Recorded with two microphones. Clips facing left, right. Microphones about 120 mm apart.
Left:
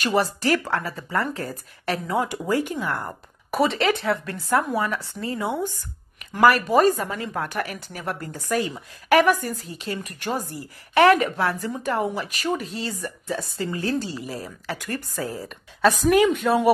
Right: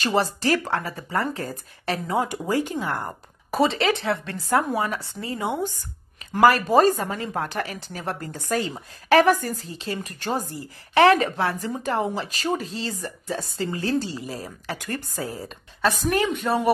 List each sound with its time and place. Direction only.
0.0 s a woman's voice: 25° right (ahead or behind)
15.8 s a woman's voice: centre (ahead or behind)